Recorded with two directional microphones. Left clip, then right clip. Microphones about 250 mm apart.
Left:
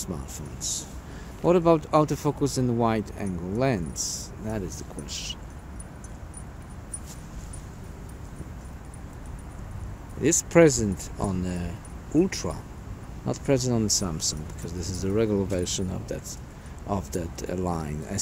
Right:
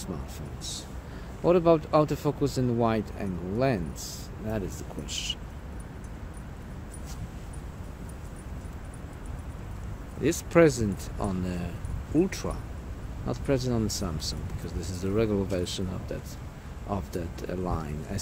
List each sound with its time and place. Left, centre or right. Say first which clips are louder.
0.0 s speech: left 2 dB; left
4.6 s speech: even; centre
10.2 s speech: left 3 dB; left